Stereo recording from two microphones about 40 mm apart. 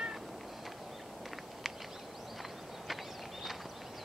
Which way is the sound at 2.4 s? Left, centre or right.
Centre.